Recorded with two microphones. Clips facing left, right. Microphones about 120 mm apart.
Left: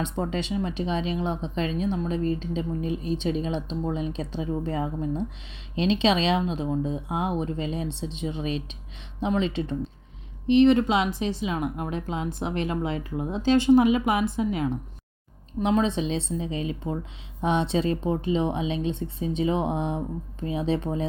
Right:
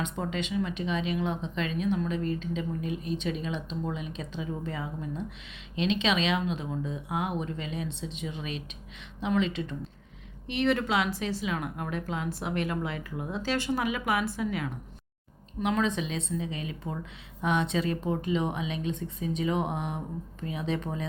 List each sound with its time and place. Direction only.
0.0 s speech: 35° left (ahead or behind)